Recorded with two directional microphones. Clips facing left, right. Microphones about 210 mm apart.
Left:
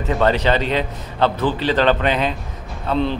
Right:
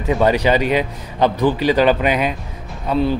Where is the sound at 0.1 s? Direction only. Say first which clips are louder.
Right 2 dB; 10° right (ahead or behind).